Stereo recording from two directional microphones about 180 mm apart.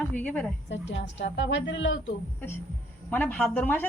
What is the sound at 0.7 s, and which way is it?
A woman's voice, 80° left.